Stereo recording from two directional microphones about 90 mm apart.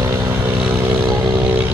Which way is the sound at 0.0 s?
30° right (ahead or behind).